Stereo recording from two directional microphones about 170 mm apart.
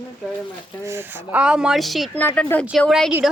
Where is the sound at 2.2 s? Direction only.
15° left (ahead or behind).